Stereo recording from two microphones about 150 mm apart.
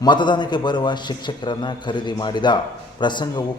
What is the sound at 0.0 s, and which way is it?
A man's voice, 30° left (ahead or behind).